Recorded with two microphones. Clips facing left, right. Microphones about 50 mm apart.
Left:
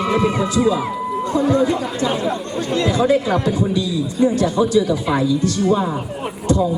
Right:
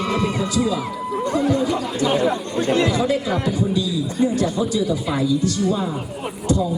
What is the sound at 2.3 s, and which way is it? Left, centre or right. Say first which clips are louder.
Speech: right 1 dB; right.